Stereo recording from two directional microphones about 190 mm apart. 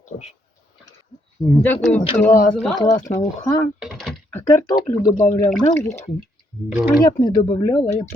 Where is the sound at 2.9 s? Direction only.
35° left (ahead or behind).